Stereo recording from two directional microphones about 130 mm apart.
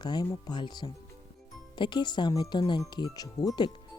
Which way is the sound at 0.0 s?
35° left (ahead or behind).